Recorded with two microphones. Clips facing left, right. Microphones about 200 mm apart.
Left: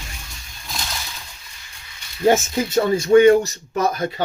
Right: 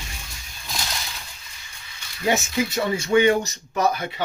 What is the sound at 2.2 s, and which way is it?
Speech, 50° left (ahead or behind).